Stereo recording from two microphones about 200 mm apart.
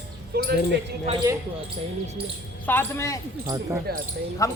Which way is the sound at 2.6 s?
10° left (ahead or behind).